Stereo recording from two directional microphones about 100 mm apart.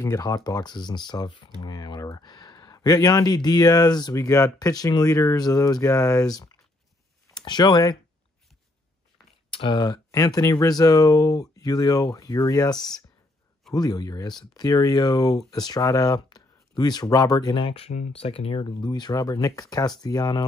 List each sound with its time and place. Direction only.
0.0 s speech: 35° left (ahead or behind)
9.5 s speech: 55° left (ahead or behind)
17.6 s speech: 85° left; by 20.4 s 40° left (ahead or behind)